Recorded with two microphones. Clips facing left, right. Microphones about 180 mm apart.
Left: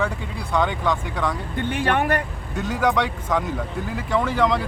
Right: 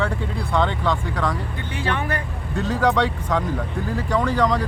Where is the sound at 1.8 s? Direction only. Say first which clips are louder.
Left 3 dB; 55° left (ahead or behind).